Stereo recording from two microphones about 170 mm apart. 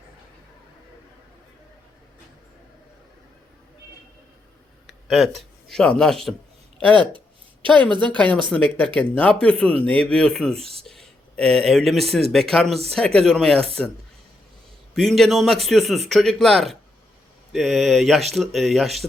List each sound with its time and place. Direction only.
4.9 s a man's voice: centre (ahead or behind)
14.9 s a man's voice: centre (ahead or behind)